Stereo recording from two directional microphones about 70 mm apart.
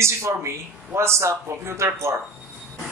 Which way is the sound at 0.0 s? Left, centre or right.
Right.